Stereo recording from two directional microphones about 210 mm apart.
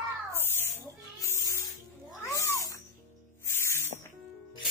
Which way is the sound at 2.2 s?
15° left (ahead or behind).